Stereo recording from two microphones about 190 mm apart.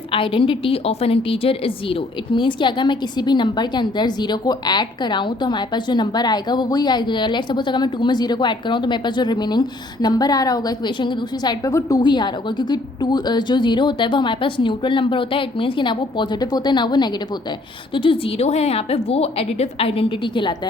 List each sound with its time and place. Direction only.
0.1 s a woman's voice: 30° left (ahead or behind)